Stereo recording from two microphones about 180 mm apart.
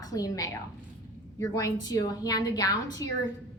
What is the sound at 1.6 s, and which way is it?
A woman's voice, 20° left (ahead or behind).